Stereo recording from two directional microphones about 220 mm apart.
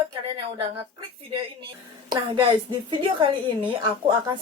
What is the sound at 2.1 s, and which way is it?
A woman's voice, 20° right (ahead or behind).